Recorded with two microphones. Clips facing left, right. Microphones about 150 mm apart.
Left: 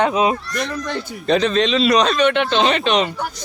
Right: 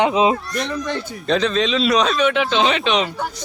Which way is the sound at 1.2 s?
5° left (ahead or behind).